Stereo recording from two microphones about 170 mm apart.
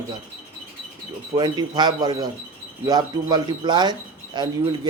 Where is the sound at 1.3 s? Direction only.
25° right (ahead or behind).